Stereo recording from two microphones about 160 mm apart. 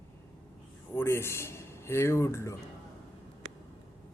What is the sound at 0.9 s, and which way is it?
A man's voice, 15° left (ahead or behind).